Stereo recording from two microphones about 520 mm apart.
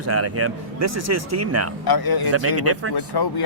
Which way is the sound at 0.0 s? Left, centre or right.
Right.